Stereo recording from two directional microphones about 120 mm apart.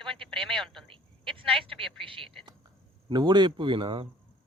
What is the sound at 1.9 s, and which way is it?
Speech, 45° right (ahead or behind).